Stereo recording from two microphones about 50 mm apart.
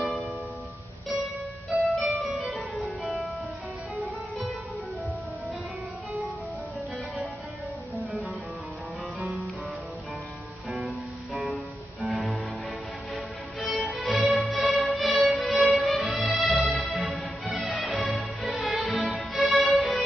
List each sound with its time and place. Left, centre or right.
1.7 s music: centre
11.5 s music: centre